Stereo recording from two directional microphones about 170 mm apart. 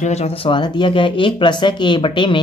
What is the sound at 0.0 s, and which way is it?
Speech, 40° left (ahead or behind).